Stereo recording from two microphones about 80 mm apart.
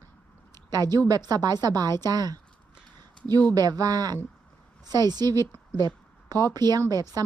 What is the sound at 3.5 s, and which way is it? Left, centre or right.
A woman's voice, right.